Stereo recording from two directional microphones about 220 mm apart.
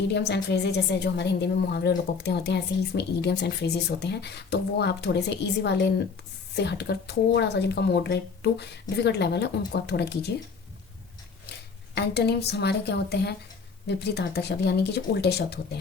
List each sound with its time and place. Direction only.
0.1 s a woman's voice: 50° left (ahead or behind)
11.9 s a woman's voice: 50° left (ahead or behind)